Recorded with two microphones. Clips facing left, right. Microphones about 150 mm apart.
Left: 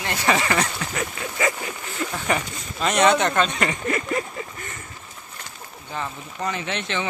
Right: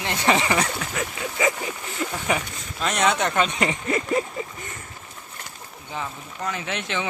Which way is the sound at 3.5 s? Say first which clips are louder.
Even; 20° right (ahead or behind).